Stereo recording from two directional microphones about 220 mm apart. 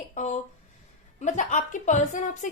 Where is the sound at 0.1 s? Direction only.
30° left (ahead or behind).